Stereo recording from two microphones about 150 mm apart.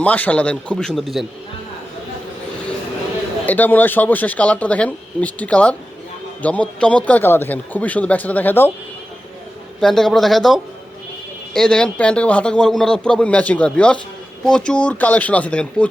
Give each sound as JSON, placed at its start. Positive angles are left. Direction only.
{"t": 0.0, "sound": "speech", "side_deg": 10}
{"t": 3.4, "sound": "speech", "side_deg": 10}
{"t": 9.8, "sound": "speech", "side_deg": 5}